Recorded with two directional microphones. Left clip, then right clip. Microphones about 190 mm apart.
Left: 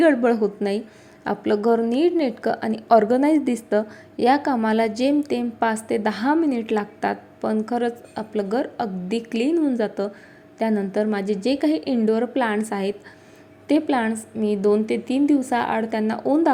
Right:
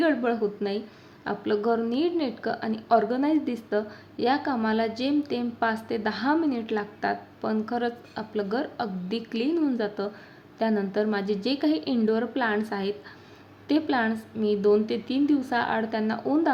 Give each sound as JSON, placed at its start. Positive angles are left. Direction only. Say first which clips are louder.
{"t": 0.0, "sound": "a woman's voice", "louder": "left 7 dB", "side_deg": 30}